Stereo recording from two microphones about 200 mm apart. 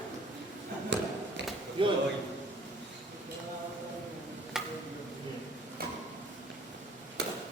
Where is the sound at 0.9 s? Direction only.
60° right (ahead or behind).